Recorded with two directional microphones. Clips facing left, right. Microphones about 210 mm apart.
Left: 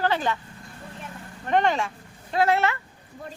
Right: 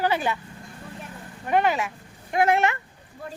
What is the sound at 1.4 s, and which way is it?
Speech, 10° right (ahead or behind).